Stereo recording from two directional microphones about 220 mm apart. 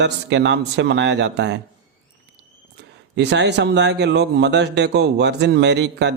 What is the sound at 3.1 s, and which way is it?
A man's voice, 50° right (ahead or behind).